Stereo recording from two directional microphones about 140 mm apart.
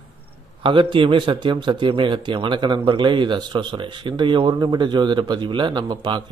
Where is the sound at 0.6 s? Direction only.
35° right (ahead or behind).